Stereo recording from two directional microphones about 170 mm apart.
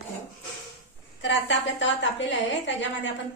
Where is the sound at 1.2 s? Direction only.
90° left.